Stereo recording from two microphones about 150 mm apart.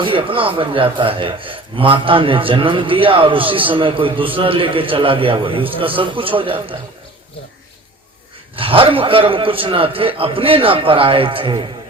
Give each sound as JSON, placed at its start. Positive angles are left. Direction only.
{"t": 0.0, "sound": "a man's voice", "side_deg": -35}
{"t": 8.5, "sound": "a man's voice", "side_deg": -35}